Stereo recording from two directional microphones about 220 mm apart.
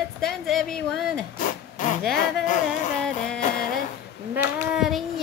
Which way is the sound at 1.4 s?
40° left (ahead or behind).